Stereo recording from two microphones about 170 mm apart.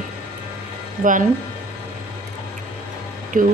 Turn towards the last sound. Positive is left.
turn(degrees=-50)  # may be behind; listen again after turning